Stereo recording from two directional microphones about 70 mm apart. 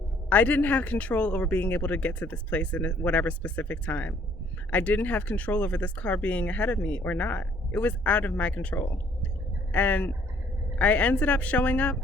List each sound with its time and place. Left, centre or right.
0.3 s speech: left